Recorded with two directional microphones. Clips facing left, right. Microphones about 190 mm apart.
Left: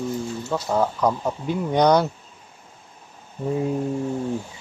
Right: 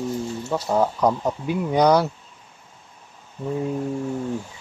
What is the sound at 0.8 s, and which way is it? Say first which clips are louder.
Speech: right 2 dB; 15° right (ahead or behind).